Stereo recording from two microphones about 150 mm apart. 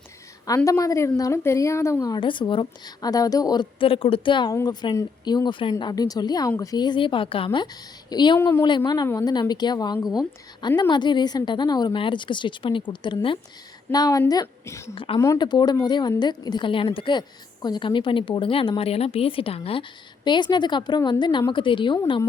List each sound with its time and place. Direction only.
0.4 s a woman's voice: 20° left (ahead or behind)
8.4 s speech: 15° left (ahead or behind)
8.6 s a woman's voice: 30° left (ahead or behind)
14.9 s speech: 35° left (ahead or behind)
15.2 s a woman's voice: 25° left (ahead or behind)